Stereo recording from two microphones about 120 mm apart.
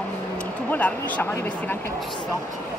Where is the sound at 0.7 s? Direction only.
15° left (ahead or behind).